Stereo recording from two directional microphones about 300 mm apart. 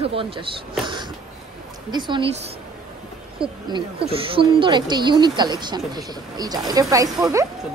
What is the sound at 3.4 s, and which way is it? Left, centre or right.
Speech, centre.